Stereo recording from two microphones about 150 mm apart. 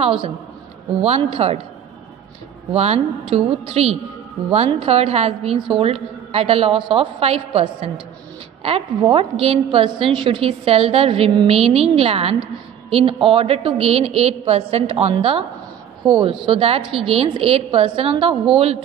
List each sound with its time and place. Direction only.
0.0 s a woman's voice: 35° right (ahead or behind)
2.7 s a woman's voice: 45° right (ahead or behind)
9.1 s a woman's voice: 40° right (ahead or behind)